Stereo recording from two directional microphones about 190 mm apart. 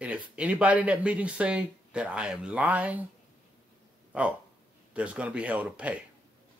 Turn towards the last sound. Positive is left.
turn(degrees=-5)  # may be behind; listen again after turning